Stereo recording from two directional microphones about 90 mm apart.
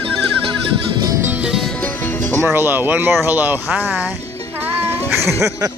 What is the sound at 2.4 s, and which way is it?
Speech, 25° right (ahead or behind).